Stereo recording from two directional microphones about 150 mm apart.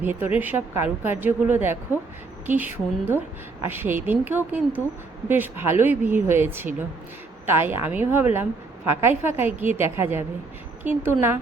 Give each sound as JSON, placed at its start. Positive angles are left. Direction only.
{"t": 0.0, "sound": "a woman's voice", "side_deg": -15}